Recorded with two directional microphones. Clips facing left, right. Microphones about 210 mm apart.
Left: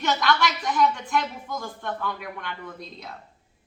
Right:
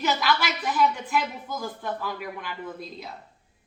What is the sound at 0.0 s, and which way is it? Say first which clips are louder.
Speech: left 2 dB; 5° right (ahead or behind).